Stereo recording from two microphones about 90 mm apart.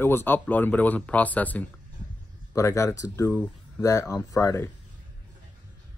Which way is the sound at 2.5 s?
35° left (ahead or behind).